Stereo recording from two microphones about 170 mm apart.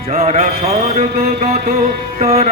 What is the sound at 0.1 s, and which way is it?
Music, 40° right (ahead or behind).